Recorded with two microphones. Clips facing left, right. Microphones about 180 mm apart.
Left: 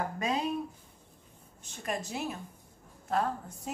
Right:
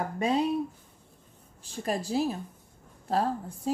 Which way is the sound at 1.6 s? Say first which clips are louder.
Right 5 dB; 30° right (ahead or behind).